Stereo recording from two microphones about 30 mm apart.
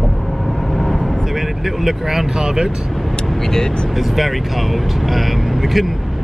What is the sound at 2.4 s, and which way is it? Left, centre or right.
Speech, right.